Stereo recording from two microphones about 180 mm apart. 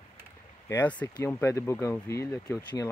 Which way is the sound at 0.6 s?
15° left (ahead or behind).